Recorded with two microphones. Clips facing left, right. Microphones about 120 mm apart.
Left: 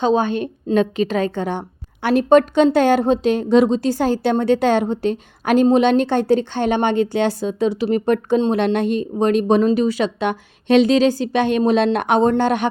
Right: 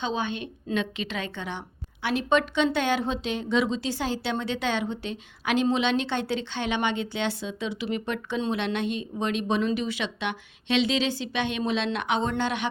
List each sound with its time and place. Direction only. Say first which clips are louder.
0.0 s a woman's voice: left 12 dB; 45° left (ahead or behind)